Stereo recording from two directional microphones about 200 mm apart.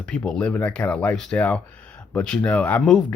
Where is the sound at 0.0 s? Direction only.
5° left (ahead or behind).